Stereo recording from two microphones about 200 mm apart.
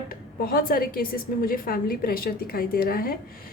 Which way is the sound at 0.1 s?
45° left (ahead or behind).